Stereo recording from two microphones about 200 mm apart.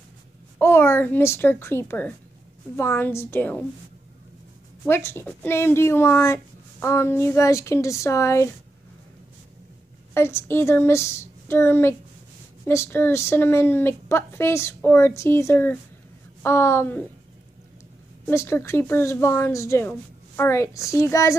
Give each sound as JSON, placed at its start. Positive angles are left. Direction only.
{"t": 0.6, "sound": "speech", "side_deg": 10}
{"t": 4.8, "sound": "speech", "side_deg": 10}
{"t": 10.1, "sound": "speech", "side_deg": 10}
{"t": 18.2, "sound": "speech", "side_deg": 15}